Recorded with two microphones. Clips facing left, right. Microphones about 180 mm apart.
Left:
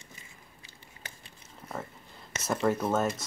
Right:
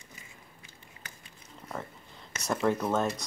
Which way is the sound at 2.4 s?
Centre (ahead or behind).